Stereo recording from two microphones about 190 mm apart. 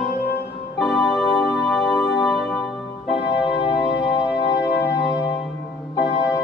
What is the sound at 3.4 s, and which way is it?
Music, 5° right (ahead or behind).